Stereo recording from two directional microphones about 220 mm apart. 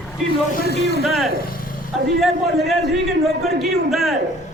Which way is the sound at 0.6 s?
50° left (ahead or behind).